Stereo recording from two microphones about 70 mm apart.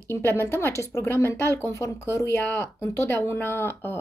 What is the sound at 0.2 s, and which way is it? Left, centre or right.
A woman's voice, left.